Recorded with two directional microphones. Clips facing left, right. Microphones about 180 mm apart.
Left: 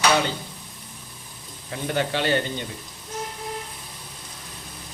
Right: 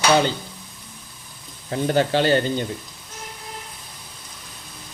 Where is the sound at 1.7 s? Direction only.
35° right (ahead or behind).